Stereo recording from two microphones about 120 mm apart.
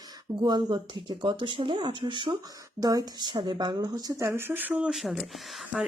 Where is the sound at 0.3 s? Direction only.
40° right (ahead or behind); by 5.3 s centre (ahead or behind).